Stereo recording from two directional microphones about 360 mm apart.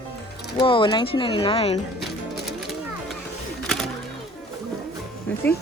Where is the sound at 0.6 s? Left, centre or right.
Centre.